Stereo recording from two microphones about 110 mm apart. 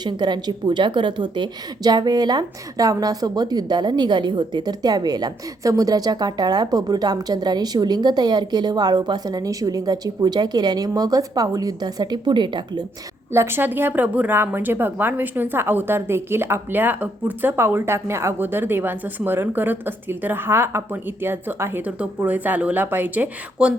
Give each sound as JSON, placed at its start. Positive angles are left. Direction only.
{"t": 0.0, "sound": "a woman's voice", "side_deg": -40}
{"t": 13.3, "sound": "speech", "side_deg": -20}